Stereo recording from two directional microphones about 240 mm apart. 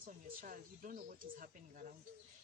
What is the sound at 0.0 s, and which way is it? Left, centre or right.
Speech, right.